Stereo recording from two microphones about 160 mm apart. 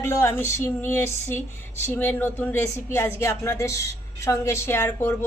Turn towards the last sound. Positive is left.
turn(degrees=15)  # may be behind; listen again after turning